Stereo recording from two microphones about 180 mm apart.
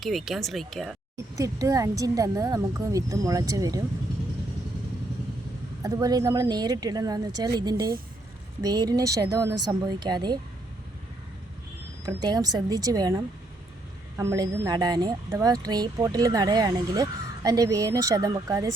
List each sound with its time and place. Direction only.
0.0 s speech: centre (ahead or behind)
1.4 s speech: 20° right (ahead or behind)
5.8 s speech: 20° right (ahead or behind)
12.0 s speech: 20° right (ahead or behind)